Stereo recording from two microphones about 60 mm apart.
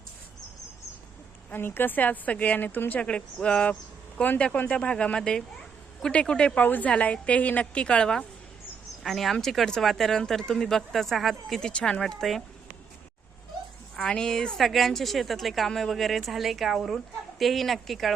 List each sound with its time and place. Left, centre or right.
1.5 s a woman's voice: left
3.0 s a woman's voice: centre
6.7 s a woman's voice: left
9.0 s a woman's voice: centre
11.7 s speech: centre
13.9 s a woman's voice: centre